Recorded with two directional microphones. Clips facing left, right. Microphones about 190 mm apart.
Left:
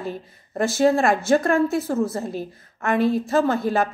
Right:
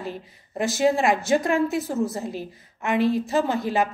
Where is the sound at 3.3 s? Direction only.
15° right (ahead or behind).